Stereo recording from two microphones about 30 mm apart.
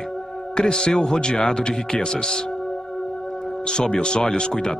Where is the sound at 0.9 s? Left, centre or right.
Centre.